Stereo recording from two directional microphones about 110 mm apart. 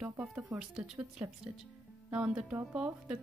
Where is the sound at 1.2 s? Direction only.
20° right (ahead or behind).